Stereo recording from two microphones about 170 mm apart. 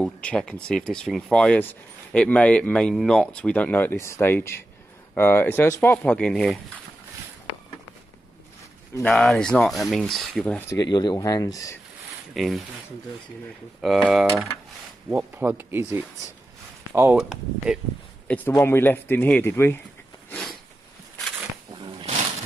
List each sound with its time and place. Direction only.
0.0 s speech: 5° left (ahead or behind)
8.9 s speech: 10° left (ahead or behind)
10.7 s speech: 25° left (ahead or behind)
12.4 s speech: centre (ahead or behind)
13.7 s speech: 5° right (ahead or behind)
17.2 s speech: centre (ahead or behind)
18.5 s speech: 15° left (ahead or behind)
20.2 s a sound: 5° left (ahead or behind)